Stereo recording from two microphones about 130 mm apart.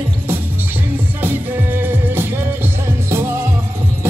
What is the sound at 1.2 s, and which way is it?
Music, 15° right (ahead or behind).